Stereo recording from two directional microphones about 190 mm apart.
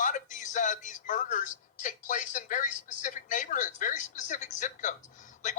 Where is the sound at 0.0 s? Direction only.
40° left (ahead or behind).